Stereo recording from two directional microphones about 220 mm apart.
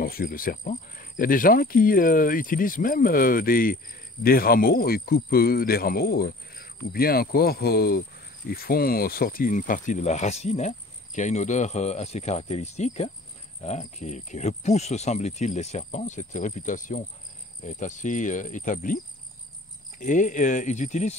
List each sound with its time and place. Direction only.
0.0 s speech: 40° left (ahead or behind)
20.0 s speech: 35° left (ahead or behind)